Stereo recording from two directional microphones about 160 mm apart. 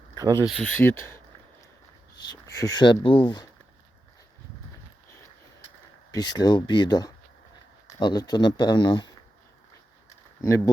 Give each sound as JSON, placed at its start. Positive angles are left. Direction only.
{"t": 0.1, "sound": "a sound", "side_deg": -25}
{"t": 0.4, "sound": "speech", "side_deg": 0}
{"t": 0.8, "sound": "speech", "side_deg": 10}
{"t": 2.1, "sound": "speech", "side_deg": 20}
{"t": 6.1, "sound": "speech", "side_deg": 25}